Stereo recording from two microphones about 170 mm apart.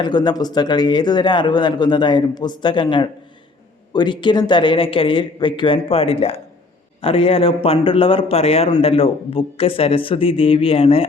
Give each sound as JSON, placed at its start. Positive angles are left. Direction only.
{"t": 0.0, "sound": "a man's voice", "side_deg": 25}